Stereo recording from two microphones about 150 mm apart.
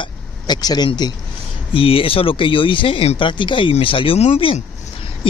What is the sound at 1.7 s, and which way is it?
Speech, 40° left (ahead or behind).